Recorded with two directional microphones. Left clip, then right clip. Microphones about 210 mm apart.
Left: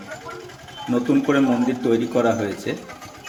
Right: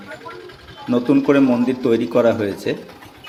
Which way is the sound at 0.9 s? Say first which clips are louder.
Right 4 dB; 15° right (ahead or behind).